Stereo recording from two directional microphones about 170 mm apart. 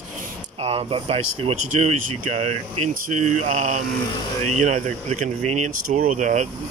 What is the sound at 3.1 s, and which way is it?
Speech, 45° right (ahead or behind).